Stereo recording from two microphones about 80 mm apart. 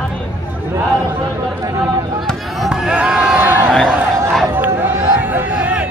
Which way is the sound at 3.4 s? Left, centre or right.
Right.